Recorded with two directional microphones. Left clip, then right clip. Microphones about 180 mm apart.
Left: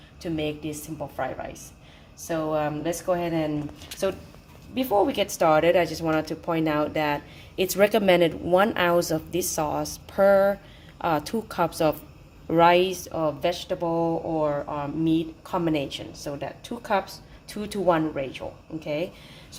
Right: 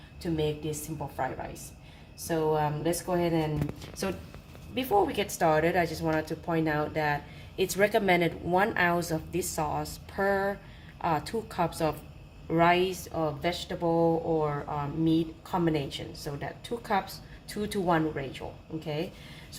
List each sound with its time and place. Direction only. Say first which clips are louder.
0.2 s speech: left 1 dB; 30° left (ahead or behind)
2.2 s speech: left 1 dB; 25° left (ahead or behind)
4.7 s speech: left 4 dB; 40° left (ahead or behind)